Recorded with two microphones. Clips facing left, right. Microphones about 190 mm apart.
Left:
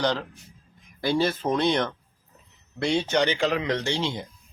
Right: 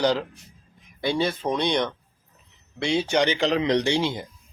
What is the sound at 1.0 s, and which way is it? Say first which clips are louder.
Speech: left 1 dB; centre (ahead or behind).